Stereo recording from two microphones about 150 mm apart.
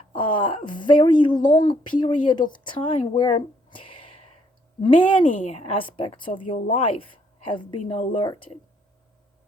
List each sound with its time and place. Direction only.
0.1 s a woman's voice: 35° left (ahead or behind)
5.4 s a woman's voice: 45° left (ahead or behind)
8.1 s a woman's voice: 30° left (ahead or behind)